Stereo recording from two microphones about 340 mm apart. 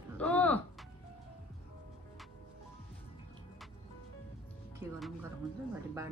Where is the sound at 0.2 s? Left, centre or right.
Centre.